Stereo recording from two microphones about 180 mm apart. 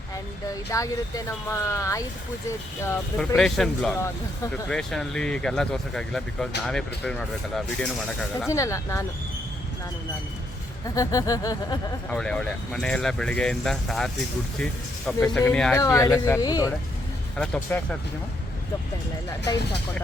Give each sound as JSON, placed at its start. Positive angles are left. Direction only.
{"t": 0.7, "sound": "speech", "side_deg": 20}
{"t": 3.2, "sound": "speech", "side_deg": 0}
{"t": 8.4, "sound": "speech", "side_deg": 15}
{"t": 10.8, "sound": "music", "side_deg": 20}
{"t": 12.0, "sound": "speech", "side_deg": 5}
{"t": 15.8, "sound": "music", "side_deg": 20}
{"t": 17.3, "sound": "speech", "side_deg": 5}